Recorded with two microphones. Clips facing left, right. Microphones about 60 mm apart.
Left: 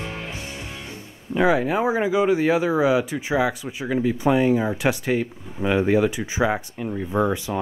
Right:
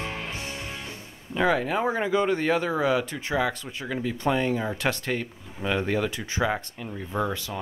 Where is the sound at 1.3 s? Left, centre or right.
Centre.